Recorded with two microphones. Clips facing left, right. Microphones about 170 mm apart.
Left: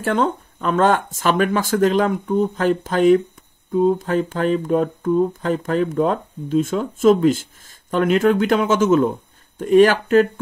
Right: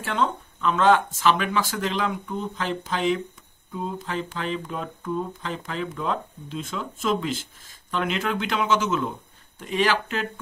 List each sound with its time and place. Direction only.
0.0 s speech: 50° left (ahead or behind)